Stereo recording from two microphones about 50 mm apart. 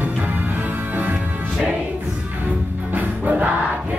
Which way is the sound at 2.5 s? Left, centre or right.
Right.